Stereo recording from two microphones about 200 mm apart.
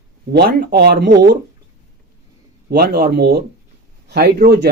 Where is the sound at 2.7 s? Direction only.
50° right (ahead or behind).